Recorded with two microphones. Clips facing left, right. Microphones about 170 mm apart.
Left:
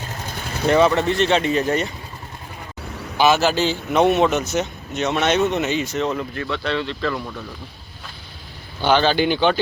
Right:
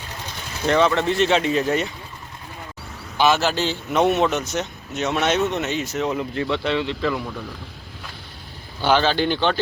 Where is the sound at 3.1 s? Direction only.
5° left (ahead or behind).